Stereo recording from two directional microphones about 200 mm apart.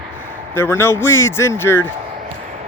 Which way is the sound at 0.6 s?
10° left (ahead or behind).